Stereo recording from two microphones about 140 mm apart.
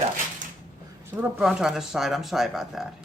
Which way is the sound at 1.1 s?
10° right (ahead or behind).